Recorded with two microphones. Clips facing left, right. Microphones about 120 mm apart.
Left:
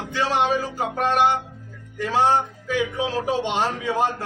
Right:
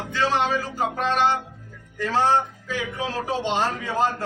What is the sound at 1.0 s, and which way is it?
A man's voice, 15° left (ahead or behind).